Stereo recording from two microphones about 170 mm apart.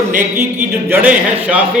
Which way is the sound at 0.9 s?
10° right (ahead or behind).